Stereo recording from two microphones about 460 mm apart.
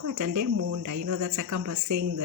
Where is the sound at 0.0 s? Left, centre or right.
Right.